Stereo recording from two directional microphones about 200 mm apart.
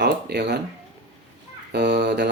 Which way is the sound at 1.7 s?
55° right (ahead or behind).